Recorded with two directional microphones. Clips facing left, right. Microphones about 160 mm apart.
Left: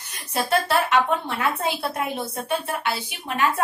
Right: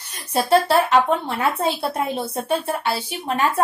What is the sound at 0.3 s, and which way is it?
A woman's voice, 30° right (ahead or behind).